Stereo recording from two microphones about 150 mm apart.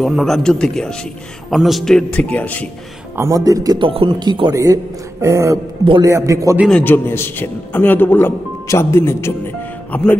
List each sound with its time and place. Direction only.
0.0 s a man's voice: centre (ahead or behind)
3.2 s speech: 20° right (ahead or behind)
6.7 s a man's voice: 15° left (ahead or behind)